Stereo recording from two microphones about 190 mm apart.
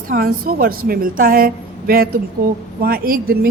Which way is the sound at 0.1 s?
50° right (ahead or behind).